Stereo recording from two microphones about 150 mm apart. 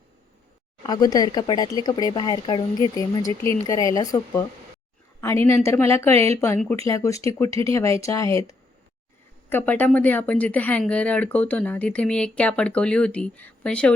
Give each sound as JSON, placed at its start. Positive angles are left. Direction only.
{"t": 0.9, "sound": "speech", "side_deg": 25}
{"t": 6.1, "sound": "speech", "side_deg": -45}
{"t": 6.8, "sound": "speech", "side_deg": 20}